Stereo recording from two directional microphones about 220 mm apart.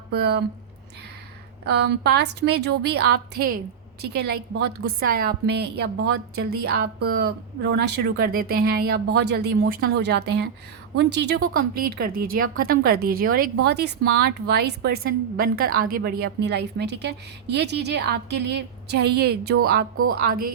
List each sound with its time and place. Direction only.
0.1 s a woman's voice: 50° right (ahead or behind)
1.6 s a woman's voice: 50° right (ahead or behind)